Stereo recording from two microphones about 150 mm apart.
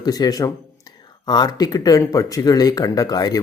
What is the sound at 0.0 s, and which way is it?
Speech, 25° left (ahead or behind).